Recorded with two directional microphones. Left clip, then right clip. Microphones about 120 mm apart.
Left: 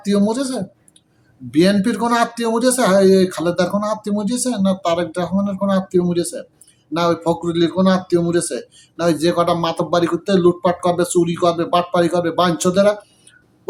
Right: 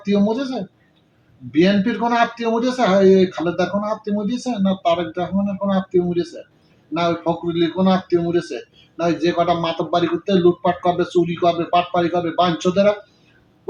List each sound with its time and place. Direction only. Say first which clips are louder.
0.0 s speech: left 1 dB; 30° left (ahead or behind)